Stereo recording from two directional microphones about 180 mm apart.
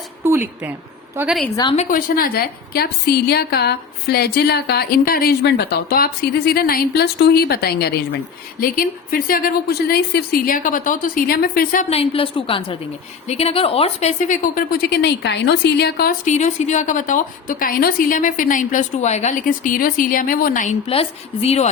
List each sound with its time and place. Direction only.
0.3 s a woman's voice: 10° right (ahead or behind)
1.7 s speech: 40° left (ahead or behind)
2.0 s a woman's voice: 55° left (ahead or behind)
11.9 s a woman's voice: 35° left (ahead or behind); by 16.1 s 60° left (ahead or behind)
16.2 s a woman's voice: 40° left (ahead or behind)
20.8 s speech: 35° left (ahead or behind)